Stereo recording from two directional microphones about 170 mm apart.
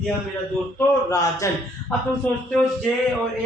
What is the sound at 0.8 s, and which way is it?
Speech, 20° left (ahead or behind).